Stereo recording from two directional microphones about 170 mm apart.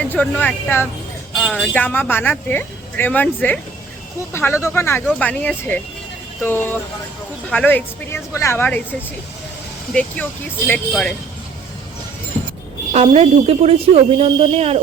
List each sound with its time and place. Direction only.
0.1 s speech: 10° left (ahead or behind)
1.4 s a sound: 5° right (ahead or behind)
1.6 s speech: 10° left (ahead or behind)
9.9 s speech: 10° left (ahead or behind)
12.9 s a woman's voice: 35° right (ahead or behind)